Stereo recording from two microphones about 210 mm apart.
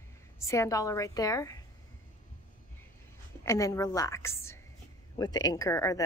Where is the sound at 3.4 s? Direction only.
15° left (ahead or behind).